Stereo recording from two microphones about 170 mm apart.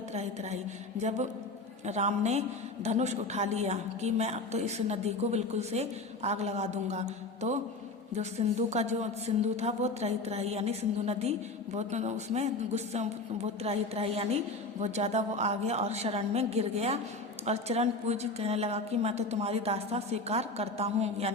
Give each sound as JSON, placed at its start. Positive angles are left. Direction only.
{"t": 0.1, "sound": "speech", "side_deg": -40}